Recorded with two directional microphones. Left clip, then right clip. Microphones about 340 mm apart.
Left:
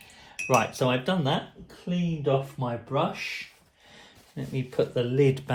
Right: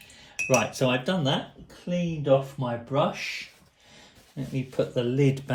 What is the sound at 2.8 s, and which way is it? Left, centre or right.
Speech, centre.